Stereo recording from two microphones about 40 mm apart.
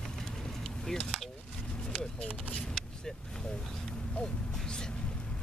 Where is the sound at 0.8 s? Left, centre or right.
Centre.